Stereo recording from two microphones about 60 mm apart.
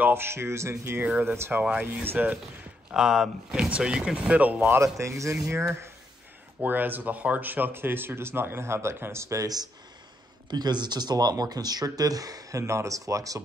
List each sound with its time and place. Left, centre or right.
0.0 s speech: right
1.8 s speech: right
2.9 s speech: centre; by 4.7 s right
4.7 s speech: right
6.6 s speech: right
11.1 s speech: right